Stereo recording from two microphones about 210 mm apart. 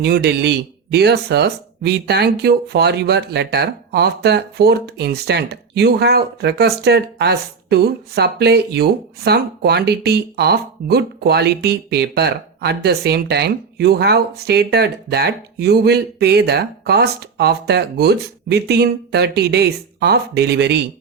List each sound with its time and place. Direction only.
0.0 s speech: 50° right (ahead or behind)